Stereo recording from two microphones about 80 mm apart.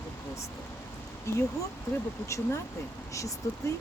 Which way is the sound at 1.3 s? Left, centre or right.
Left.